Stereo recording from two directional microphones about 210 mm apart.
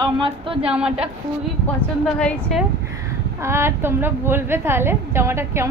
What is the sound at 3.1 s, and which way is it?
A woman's voice, 10° right (ahead or behind).